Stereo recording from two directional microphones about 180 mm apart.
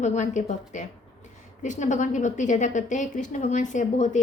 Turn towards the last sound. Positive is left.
turn(degrees=45)  # may be behind; listen again after turning